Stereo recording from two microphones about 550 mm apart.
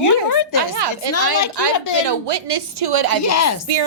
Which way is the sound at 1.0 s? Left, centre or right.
Right.